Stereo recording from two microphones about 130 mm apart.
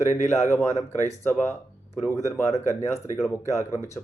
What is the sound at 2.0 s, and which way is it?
Speech, 20° left (ahead or behind).